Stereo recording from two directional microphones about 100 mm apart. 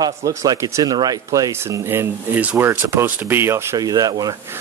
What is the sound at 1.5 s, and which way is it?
Speech, 25° right (ahead or behind).